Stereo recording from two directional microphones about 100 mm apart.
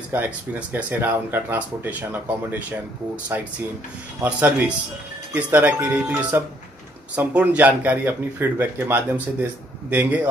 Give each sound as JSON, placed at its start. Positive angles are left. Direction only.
{"t": 0.1, "sound": "speech", "side_deg": -15}